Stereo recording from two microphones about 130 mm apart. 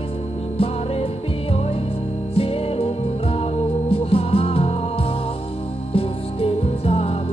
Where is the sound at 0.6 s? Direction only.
45° left (ahead or behind).